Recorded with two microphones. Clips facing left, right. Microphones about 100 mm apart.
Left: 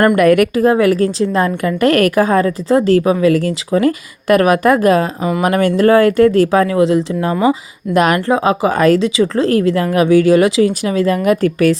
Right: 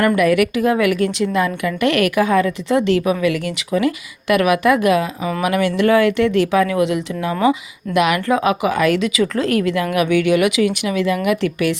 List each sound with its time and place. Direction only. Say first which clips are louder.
0.2 s a woman's voice: left 5 dB; 45° left (ahead or behind)
8.3 s a woman's voice: left 3 dB; 30° left (ahead or behind)